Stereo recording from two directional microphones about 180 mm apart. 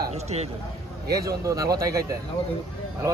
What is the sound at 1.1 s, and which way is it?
Speech, 20° right (ahead or behind).